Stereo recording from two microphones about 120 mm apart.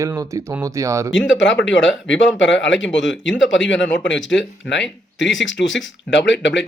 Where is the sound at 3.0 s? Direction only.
Centre (ahead or behind).